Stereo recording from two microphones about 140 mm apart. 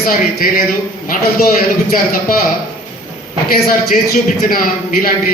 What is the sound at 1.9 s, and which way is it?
Speech, 90° left.